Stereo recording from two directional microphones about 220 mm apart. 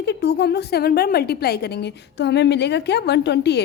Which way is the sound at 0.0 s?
50° left (ahead or behind).